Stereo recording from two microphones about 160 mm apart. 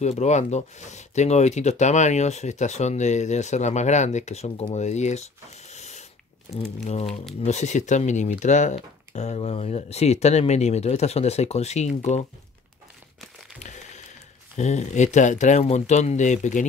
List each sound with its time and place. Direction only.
0.0 s speech: 45° left (ahead or behind)
13.6 s a sound: 45° left (ahead or behind)
14.6 s speech: 45° left (ahead or behind)